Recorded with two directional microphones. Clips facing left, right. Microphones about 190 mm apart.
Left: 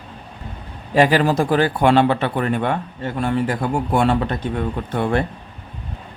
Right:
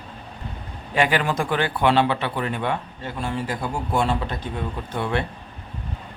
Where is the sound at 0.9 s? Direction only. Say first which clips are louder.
Left 6 dB; 35° left (ahead or behind).